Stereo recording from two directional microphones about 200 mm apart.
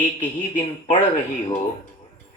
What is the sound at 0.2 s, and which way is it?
Speech, 40° left (ahead or behind).